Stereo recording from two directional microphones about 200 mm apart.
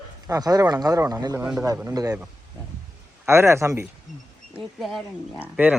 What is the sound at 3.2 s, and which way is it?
Speech, 15° right (ahead or behind).